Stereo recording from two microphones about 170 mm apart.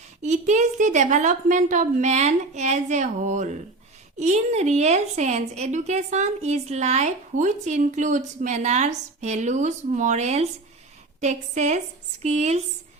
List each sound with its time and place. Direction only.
0.2 s a woman's voice: 45° right (ahead or behind)